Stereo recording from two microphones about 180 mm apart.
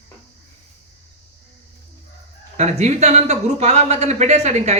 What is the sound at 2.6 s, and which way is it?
Speech, 40° right (ahead or behind).